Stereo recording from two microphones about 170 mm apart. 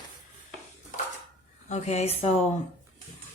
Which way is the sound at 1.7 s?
40° left (ahead or behind).